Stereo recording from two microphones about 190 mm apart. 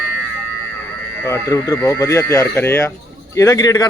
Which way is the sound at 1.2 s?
15° left (ahead or behind).